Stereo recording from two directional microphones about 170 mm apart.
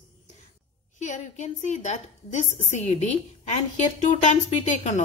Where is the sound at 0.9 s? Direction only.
45° left (ahead or behind).